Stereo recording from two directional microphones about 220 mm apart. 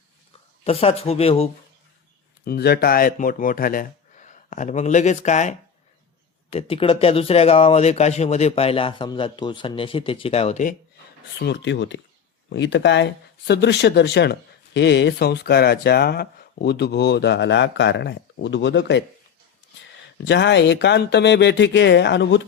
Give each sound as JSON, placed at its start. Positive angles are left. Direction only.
{"t": 0.6, "sound": "speech", "side_deg": 25}
{"t": 2.4, "sound": "speech", "side_deg": 45}
{"t": 11.3, "sound": "speech", "side_deg": 50}
{"t": 20.2, "sound": "speech", "side_deg": 55}